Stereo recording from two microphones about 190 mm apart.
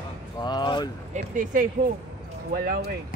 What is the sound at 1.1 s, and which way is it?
Speech, 45° right (ahead or behind).